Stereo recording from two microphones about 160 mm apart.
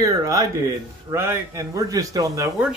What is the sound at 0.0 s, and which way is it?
Speech, 20° right (ahead or behind).